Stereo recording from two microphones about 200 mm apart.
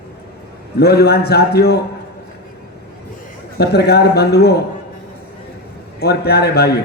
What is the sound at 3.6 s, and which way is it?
Speech, 55° left (ahead or behind).